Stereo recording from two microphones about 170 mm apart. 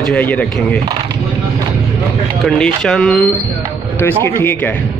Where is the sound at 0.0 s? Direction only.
10° left (ahead or behind).